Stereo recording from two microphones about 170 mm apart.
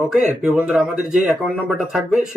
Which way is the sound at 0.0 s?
5° right (ahead or behind).